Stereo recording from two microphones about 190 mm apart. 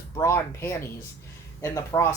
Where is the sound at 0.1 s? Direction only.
15° left (ahead or behind).